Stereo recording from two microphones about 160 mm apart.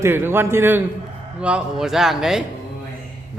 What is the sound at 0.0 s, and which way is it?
A man's voice, 15° right (ahead or behind).